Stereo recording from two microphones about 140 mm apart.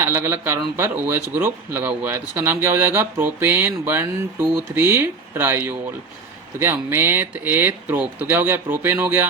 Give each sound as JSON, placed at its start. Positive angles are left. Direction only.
{"t": 0.0, "sound": "speech", "side_deg": -15}